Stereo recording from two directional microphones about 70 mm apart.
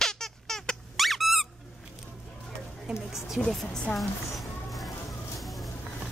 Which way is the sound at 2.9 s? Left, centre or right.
Centre.